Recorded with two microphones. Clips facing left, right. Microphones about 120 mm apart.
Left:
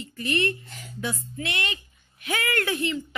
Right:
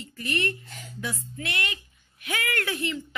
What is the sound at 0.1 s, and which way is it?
A woman's voice, 25° left (ahead or behind).